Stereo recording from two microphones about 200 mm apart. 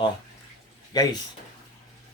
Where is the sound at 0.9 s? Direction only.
20° left (ahead or behind).